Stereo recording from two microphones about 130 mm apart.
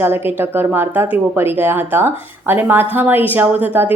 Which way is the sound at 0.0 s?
15° right (ahead or behind).